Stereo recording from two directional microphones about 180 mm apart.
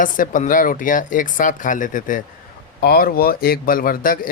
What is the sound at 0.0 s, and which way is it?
Speech, 50° left (ahead or behind).